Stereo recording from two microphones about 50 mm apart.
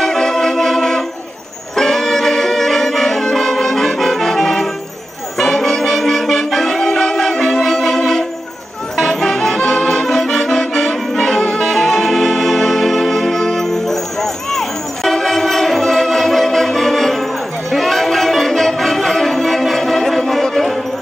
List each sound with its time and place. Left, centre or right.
0.0 s music: centre
1.8 s brass instrument: centre
5.4 s music: centre
10.0 s music: centre
10.3 s accordion: centre
11.1 s saxophone: centre
17.6 s music: centre